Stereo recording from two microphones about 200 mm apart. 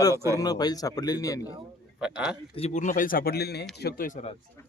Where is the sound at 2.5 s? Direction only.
35° left (ahead or behind).